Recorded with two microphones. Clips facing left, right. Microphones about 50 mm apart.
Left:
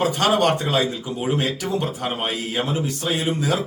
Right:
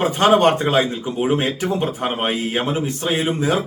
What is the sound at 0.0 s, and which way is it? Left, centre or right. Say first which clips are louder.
A man's voice: right 4 dB; right.